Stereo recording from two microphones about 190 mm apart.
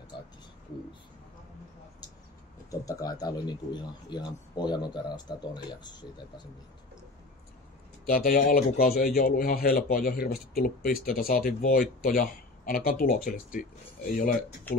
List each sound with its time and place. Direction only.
2.7 s speech: 20° left (ahead or behind)
8.1 s a man's voice: 45° left (ahead or behind)